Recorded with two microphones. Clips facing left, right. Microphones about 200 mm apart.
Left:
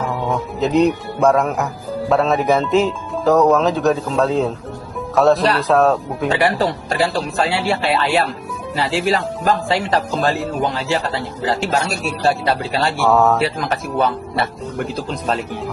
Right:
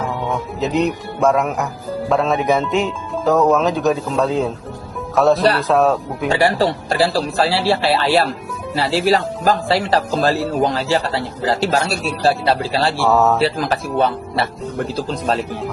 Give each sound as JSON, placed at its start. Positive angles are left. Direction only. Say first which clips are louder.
{"t": 0.1, "sound": "speech", "louder": "left 1 dB", "side_deg": 0}
{"t": 6.4, "sound": "speech", "louder": "right 1 dB", "side_deg": -30}
{"t": 13.0, "sound": "speech", "louder": "left 1 dB", "side_deg": 0}
{"t": 13.4, "sound": "speech", "louder": "right 2 dB", "side_deg": -35}